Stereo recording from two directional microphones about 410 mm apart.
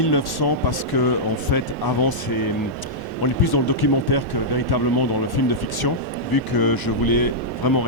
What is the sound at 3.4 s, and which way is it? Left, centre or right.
Speech, left.